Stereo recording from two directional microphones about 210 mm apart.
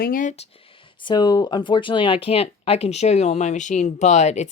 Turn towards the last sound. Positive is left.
turn(degrees=35)  # may be behind; listen again after turning